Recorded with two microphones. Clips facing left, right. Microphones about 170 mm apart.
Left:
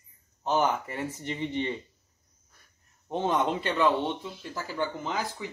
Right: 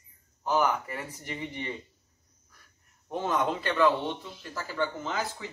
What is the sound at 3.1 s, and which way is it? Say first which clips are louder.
A man's voice: left 2 dB; 20° left (ahead or behind).